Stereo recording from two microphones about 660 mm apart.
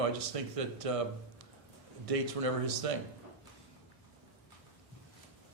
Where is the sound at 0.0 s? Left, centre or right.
Right.